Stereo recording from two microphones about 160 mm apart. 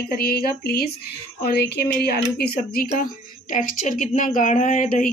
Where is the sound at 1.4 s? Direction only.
85° left.